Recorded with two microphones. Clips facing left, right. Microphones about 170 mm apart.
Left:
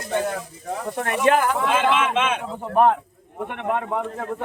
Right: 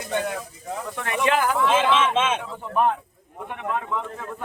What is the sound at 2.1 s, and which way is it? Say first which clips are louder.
Speech: even; 25° right (ahead or behind).